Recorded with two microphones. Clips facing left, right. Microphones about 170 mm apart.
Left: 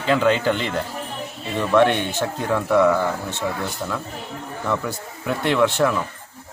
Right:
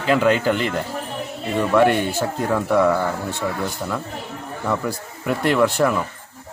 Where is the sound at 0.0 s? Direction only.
5° right (ahead or behind).